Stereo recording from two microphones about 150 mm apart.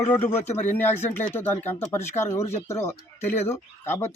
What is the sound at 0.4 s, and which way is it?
Speech, 45° left (ahead or behind).